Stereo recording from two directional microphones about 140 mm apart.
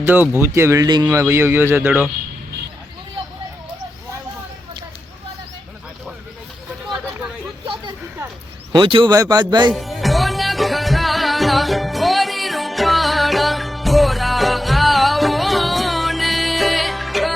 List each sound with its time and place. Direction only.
0.0 s speech: 15° right (ahead or behind)
7.6 s a sound: 35° right (ahead or behind)
8.7 s speech: 35° right (ahead or behind)
9.7 s music: centre (ahead or behind)